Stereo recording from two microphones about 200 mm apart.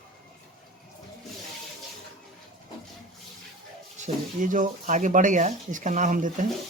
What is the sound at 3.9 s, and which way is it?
Speech, 40° right (ahead or behind).